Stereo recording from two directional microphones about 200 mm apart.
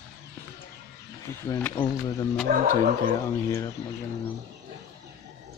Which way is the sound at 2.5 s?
45° right (ahead or behind).